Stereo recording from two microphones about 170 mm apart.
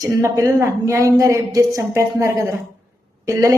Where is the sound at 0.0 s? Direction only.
15° right (ahead or behind).